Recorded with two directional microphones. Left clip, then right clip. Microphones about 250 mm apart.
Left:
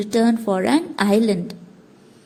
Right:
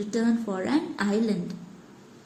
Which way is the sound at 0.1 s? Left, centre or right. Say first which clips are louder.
Left 10 dB; left.